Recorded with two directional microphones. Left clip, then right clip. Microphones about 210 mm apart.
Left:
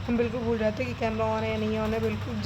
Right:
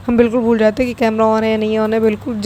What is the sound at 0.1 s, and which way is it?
Speech, 40° right (ahead or behind).